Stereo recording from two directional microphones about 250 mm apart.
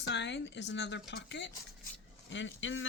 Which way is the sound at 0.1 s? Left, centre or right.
Left.